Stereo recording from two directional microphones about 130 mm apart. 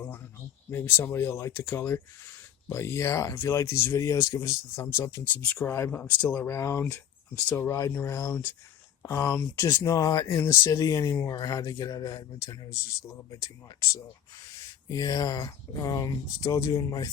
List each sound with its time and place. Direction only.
0.7 s speech: 20° left (ahead or behind)
14.8 s speech: 30° left (ahead or behind)